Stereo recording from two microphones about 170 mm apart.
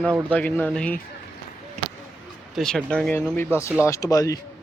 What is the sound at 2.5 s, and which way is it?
Speech, 5° left (ahead or behind).